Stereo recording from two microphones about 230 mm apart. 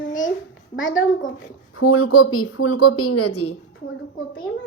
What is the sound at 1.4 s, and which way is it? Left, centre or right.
Speech, left.